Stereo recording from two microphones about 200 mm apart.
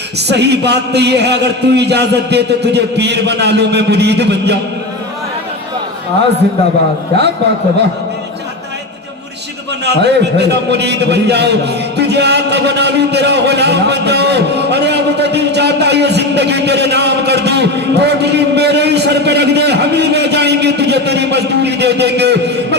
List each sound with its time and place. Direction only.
0.2 s a man's voice: 55° right (ahead or behind)
9.8 s a man's voice: 55° right (ahead or behind)